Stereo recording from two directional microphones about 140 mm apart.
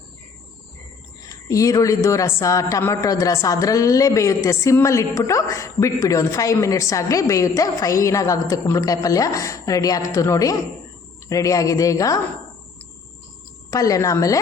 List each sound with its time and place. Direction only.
1.5 s a man's voice: 25° left (ahead or behind)
13.7 s a man's voice: 25° left (ahead or behind)